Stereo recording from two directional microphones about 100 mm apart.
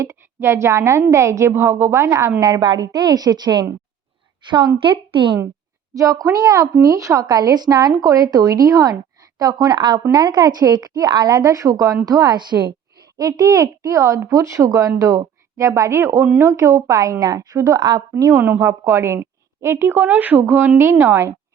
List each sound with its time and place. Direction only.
0.0 s a woman's voice: 25° right (ahead or behind); by 5.4 s 55° right (ahead or behind)
5.9 s a woman's voice: 35° right (ahead or behind)